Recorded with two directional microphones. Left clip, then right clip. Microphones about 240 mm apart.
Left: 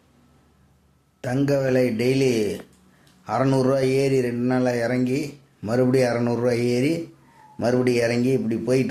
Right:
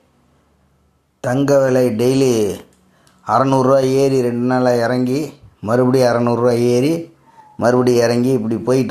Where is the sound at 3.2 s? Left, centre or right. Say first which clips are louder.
Right 8 dB; centre.